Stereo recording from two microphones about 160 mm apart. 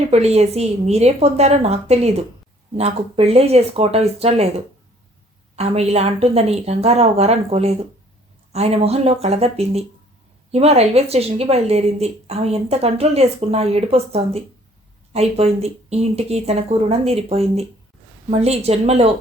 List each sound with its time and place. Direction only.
0.1 s a woman's voice: 40° right (ahead or behind)